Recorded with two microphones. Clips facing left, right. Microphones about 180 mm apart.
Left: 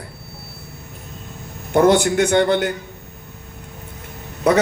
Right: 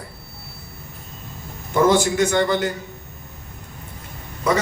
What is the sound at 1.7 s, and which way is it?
Speech, 60° left (ahead or behind).